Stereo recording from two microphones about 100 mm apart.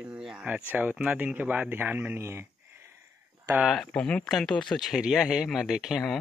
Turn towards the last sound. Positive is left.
turn(degrees=0)  # may be behind; listen again after turning